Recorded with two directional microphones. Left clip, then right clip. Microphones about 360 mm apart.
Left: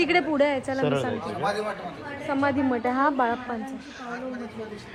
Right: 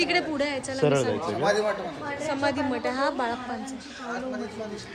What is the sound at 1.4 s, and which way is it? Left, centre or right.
Speech, right.